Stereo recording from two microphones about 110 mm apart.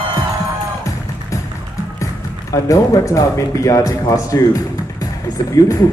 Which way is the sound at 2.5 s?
30° left (ahead or behind).